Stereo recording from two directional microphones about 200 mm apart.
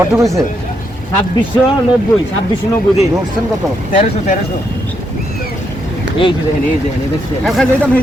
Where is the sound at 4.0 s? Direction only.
35° left (ahead or behind).